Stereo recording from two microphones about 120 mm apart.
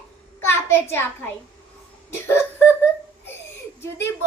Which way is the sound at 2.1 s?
20° left (ahead or behind).